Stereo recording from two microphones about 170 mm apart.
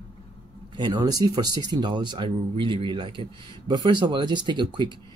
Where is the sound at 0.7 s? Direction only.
25° right (ahead or behind).